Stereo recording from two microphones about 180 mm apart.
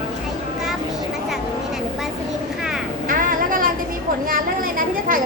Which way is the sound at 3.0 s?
50° right (ahead or behind).